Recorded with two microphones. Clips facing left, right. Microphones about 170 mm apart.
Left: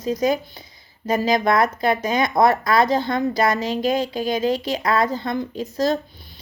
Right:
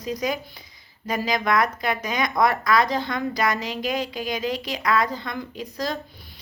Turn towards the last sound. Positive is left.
turn(degrees=25)  # may be behind; listen again after turning